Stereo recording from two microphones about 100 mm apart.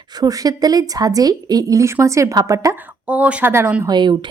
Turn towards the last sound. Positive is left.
turn(degrees=-50)  # may be behind; listen again after turning